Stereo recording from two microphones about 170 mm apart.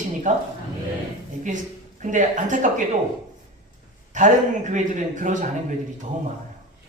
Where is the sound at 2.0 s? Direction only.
45° right (ahead or behind).